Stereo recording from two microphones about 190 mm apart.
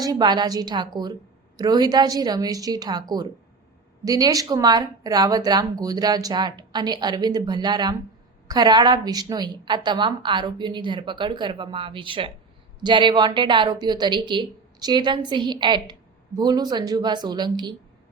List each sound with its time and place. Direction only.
0.0 s speech: 25° right (ahead or behind)